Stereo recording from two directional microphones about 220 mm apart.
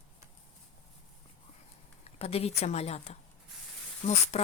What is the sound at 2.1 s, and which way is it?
A woman's voice, 25° left (ahead or behind).